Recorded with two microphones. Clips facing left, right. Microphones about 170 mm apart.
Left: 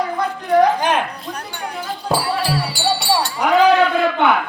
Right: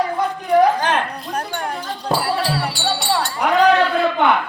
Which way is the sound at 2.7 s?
10° left (ahead or behind).